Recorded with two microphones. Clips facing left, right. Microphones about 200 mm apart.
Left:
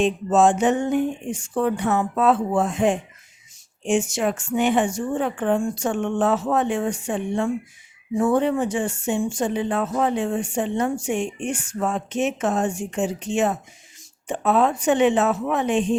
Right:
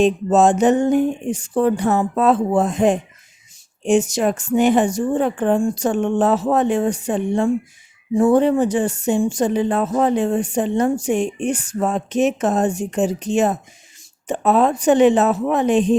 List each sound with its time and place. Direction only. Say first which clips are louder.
0.0 s speech: right 3 dB; 40° right (ahead or behind)